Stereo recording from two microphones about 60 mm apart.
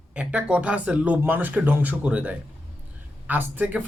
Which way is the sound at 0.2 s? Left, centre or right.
Centre.